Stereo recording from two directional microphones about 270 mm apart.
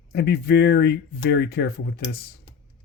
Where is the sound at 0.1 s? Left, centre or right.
Left.